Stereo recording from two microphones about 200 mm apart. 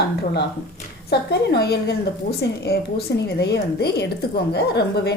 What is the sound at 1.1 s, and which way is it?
A woman's voice, 55° left (ahead or behind).